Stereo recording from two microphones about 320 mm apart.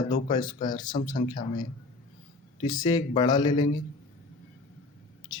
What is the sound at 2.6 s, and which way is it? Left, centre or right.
Speech, centre.